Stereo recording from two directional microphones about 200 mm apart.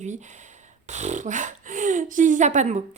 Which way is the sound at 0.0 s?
35° right (ahead or behind).